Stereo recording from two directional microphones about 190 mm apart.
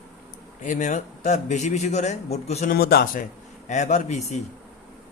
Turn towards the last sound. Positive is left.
turn(degrees=40)  # may be behind; listen again after turning